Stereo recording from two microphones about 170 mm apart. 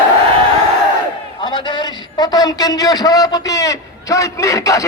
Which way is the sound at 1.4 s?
25° left (ahead or behind).